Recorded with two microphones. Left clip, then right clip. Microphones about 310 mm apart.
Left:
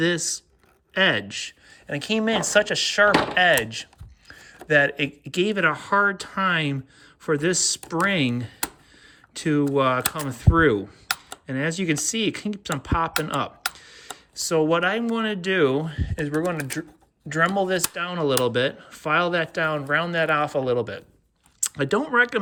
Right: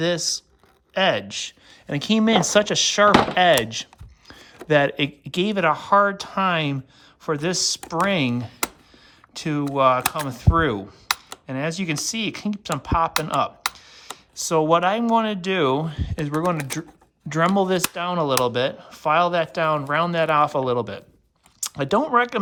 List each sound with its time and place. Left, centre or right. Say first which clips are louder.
0.0 s speech: right 1 dB; centre
13.3 s computer keyboard: right 4 dB; centre
14.7 s speech: right 4 dB; centre